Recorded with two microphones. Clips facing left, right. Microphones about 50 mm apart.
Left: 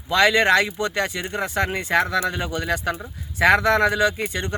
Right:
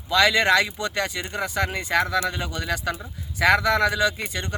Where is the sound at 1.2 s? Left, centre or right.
Centre.